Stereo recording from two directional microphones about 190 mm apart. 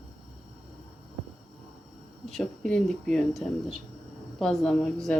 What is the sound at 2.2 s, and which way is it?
Speech, centre (ahead or behind).